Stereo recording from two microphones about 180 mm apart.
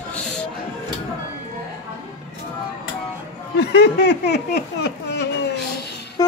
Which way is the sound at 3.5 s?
65° left (ahead or behind).